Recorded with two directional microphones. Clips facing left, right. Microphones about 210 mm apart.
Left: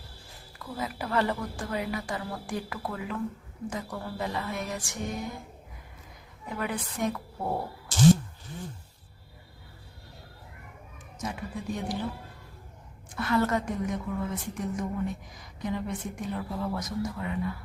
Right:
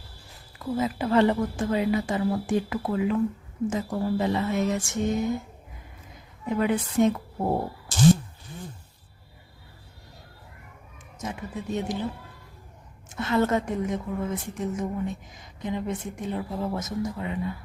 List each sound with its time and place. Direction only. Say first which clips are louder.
0.6 s a woman's voice: right 8 dB; 25° right (ahead or behind)
6.4 s a woman's voice: right 8 dB; 25° right (ahead or behind)
11.3 s a woman's voice: right 3 dB; 25° right (ahead or behind)
13.1 s a woman's voice: right 3 dB; 25° right (ahead or behind)